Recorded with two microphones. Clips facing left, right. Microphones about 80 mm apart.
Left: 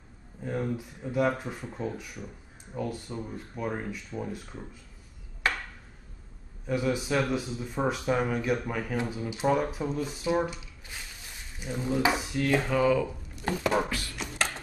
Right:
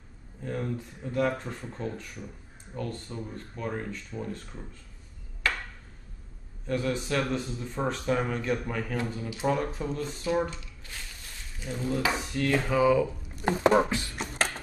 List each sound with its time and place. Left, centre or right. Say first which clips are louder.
0.4 s speech: left 2 dB; centre
6.7 s speech: left 1 dB; centre
12.2 s speech: left 1 dB; centre
13.4 s speech: right 5 dB; right
14.1 s beatboxing: left 1 dB; right